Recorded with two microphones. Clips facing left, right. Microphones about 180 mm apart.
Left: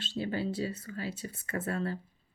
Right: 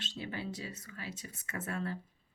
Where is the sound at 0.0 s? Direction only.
35° left (ahead or behind).